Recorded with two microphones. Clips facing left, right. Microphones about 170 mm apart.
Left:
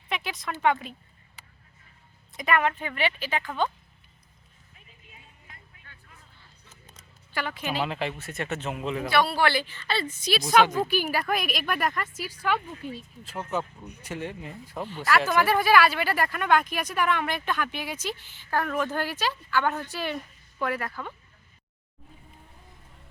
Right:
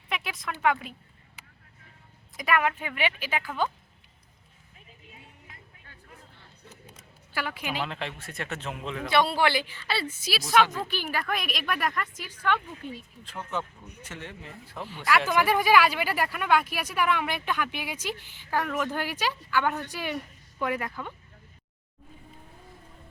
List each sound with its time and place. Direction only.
0.1 s a sound: centre (ahead or behind)
0.6 s a man's voice: 5° right (ahead or behind)
2.3 s speech: 5° right (ahead or behind)
6.7 s scissors: 10° right (ahead or behind)
7.8 s a man's voice: 5° left (ahead or behind)
9.0 s speech: 20° right (ahead or behind)
10.7 s a woman's voice: 15° left (ahead or behind)
15.3 s a woman's voice: 15° right (ahead or behind)